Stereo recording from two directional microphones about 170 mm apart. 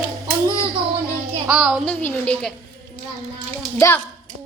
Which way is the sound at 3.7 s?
10° left (ahead or behind).